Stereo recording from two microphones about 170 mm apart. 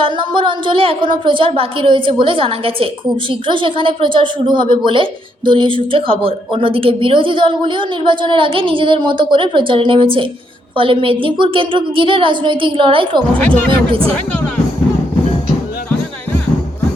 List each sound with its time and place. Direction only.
0.0 s a woman's voice: 30° right (ahead or behind)
13.3 s speech: 10° left (ahead or behind)
13.7 s a woman's voice: 30° right (ahead or behind)